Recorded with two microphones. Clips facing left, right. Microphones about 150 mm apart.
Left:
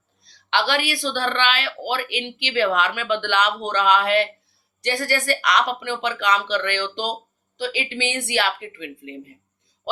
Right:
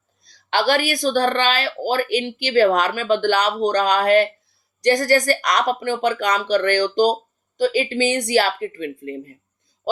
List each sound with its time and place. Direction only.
0.2 s speech: 45° right (ahead or behind)